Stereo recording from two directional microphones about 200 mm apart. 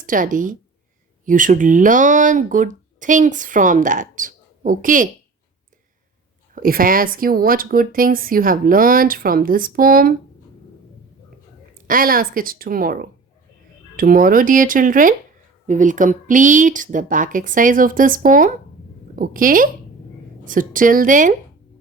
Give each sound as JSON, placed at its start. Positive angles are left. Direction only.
{"t": 0.0, "sound": "speech", "side_deg": -40}
{"t": 6.5, "sound": "speech", "side_deg": -45}
{"t": 11.9, "sound": "speech", "side_deg": -45}